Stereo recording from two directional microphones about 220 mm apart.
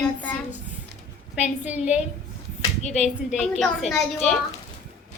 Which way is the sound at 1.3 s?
5° right (ahead or behind).